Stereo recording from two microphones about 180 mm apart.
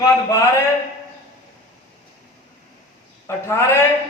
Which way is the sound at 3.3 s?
15° left (ahead or behind).